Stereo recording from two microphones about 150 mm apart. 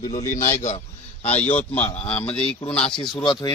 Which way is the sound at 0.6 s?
45° left (ahead or behind).